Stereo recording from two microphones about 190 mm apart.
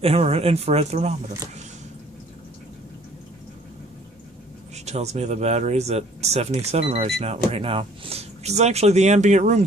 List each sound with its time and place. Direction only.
0.0 s speech: 30° right (ahead or behind)
4.8 s speech: 35° right (ahead or behind)